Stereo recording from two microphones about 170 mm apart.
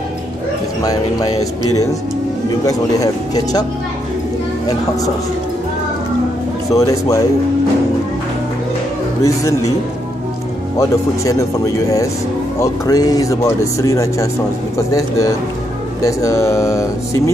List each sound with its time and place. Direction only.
2.6 s speech: 20° left (ahead or behind)
6.7 s speech: 20° left (ahead or behind)
9.2 s speech: 20° left (ahead or behind)
10.8 s speech: 20° left (ahead or behind)